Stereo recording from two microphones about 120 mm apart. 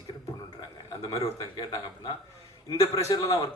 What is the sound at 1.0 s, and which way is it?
A man's voice, 30° left (ahead or behind).